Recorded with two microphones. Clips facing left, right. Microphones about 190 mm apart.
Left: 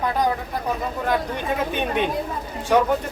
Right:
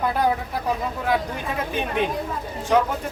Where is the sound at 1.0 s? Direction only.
Centre (ahead or behind).